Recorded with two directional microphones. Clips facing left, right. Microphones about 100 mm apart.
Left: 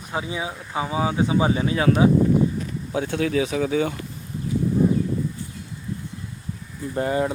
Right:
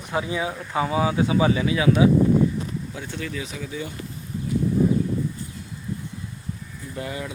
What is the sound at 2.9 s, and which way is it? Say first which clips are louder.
Speech: left 9 dB; 70° left (ahead or behind).